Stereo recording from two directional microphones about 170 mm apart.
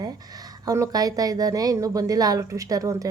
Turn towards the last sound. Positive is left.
turn(degrees=-20)  # may be behind; listen again after turning